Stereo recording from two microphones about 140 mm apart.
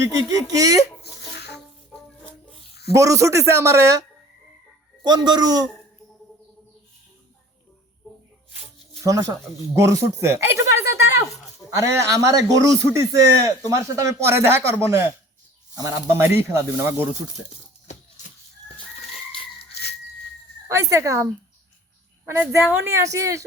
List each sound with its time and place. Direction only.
0.0 s a man's voice: 20° right (ahead or behind)
2.9 s a man's voice: 20° right (ahead or behind)
5.0 s a man's voice: 30° right (ahead or behind)
8.5 s music: 40° left (ahead or behind)
9.0 s a man's voice: 20° right (ahead or behind)
17.4 s speech: 5° right (ahead or behind)
18.2 s music: 60° left (ahead or behind)
20.7 s a man's voice: 20° right (ahead or behind)
22.3 s a man's voice: 15° right (ahead or behind)